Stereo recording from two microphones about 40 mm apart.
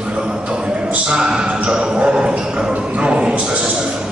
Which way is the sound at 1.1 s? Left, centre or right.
Right.